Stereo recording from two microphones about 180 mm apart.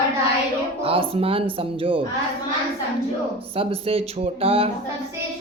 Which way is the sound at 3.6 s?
35° right (ahead or behind).